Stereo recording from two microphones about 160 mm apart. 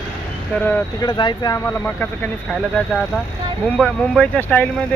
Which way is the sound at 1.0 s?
25° left (ahead or behind).